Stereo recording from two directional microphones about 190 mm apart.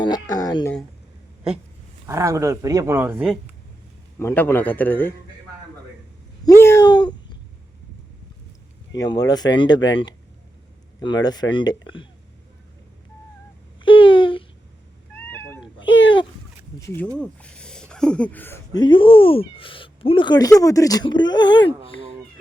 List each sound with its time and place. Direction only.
0.0 s speech: 20° left (ahead or behind)
2.0 s speech: 15° right (ahead or behind)
4.2 s a man's voice: 15° left (ahead or behind)
6.4 s a sound: 15° left (ahead or behind)
8.9 s speech: 20° left (ahead or behind)
11.0 s speech: 20° left (ahead or behind)
13.8 s babbling: 25° left (ahead or behind)
15.1 s cat: 10° left (ahead or behind)
15.8 s a sound: 75° left (ahead or behind)
17.2 s speech: 5° left (ahead or behind); by 21.7 s 25° left (ahead or behind)